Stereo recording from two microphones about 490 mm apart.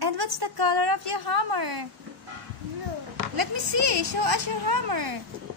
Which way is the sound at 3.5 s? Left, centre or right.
Right.